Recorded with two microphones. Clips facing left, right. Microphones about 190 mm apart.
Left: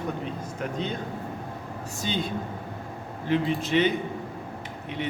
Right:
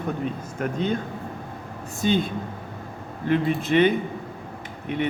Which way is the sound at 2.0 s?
50° right (ahead or behind).